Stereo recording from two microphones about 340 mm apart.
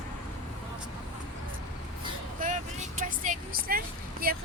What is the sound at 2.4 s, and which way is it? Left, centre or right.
Vehicle, right.